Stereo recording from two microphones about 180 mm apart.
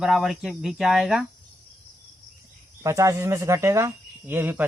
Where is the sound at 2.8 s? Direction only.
15° right (ahead or behind).